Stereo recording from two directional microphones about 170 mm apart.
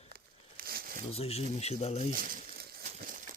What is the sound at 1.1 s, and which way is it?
Speech, 35° left (ahead or behind).